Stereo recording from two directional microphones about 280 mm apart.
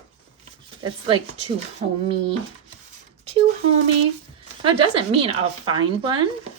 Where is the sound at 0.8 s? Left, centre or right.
Centre.